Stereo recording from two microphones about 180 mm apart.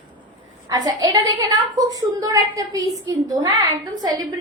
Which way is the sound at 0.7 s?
20° right (ahead or behind).